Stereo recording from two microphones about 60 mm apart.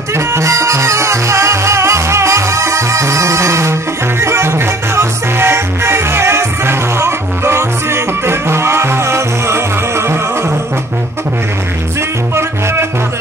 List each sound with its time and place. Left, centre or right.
0.1 s music: right